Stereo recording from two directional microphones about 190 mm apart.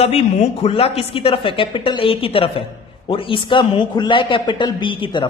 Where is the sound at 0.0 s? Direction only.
30° left (ahead or behind).